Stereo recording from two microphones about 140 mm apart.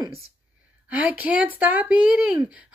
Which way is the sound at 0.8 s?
10° right (ahead or behind).